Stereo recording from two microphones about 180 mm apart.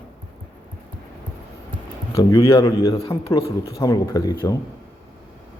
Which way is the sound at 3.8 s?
20° left (ahead or behind).